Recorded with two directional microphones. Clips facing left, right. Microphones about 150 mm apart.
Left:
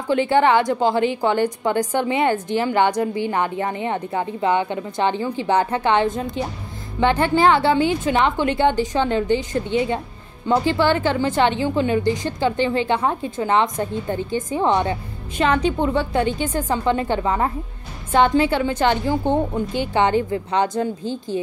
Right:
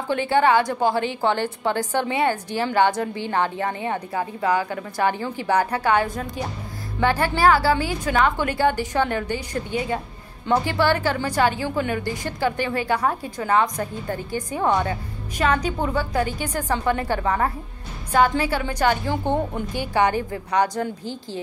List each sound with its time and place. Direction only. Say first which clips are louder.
0.1 s a woman's voice: left 2 dB; 20° left (ahead or behind)